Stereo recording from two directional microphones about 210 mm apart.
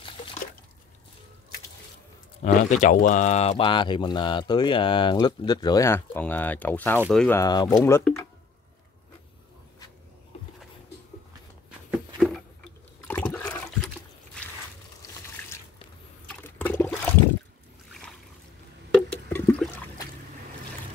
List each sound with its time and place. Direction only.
0.0 s drip: 25° left (ahead or behind)
2.4 s speech: 35° left (ahead or behind); by 7.3 s 5° left (ahead or behind)
7.3 s speech: 15° left (ahead or behind)
13.0 s toilet flush: 5° left (ahead or behind)
15.4 s water: 10° left (ahead or behind)
18.9 s a sound: 10° left (ahead or behind)